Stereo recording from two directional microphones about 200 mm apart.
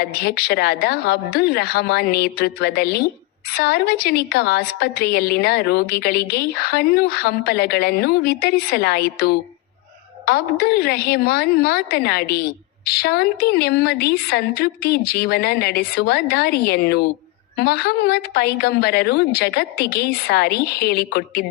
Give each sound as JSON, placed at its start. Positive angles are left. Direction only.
{"t": 0.0, "sound": "a woman's voice", "side_deg": 50}